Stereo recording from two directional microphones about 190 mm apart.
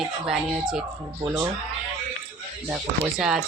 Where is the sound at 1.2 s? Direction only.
15° right (ahead or behind).